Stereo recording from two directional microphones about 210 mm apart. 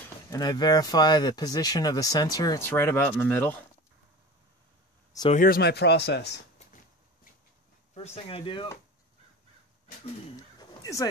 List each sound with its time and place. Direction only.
0.3 s speech: 20° left (ahead or behind)
5.3 s speech: 45° left (ahead or behind)
7.9 s speech: 30° left (ahead or behind)
10.3 s a sound: 15° left (ahead or behind)